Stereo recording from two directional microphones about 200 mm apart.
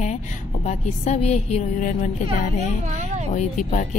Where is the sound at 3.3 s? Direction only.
35° left (ahead or behind).